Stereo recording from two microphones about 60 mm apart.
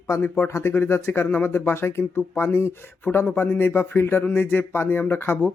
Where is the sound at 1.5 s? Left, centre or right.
Left.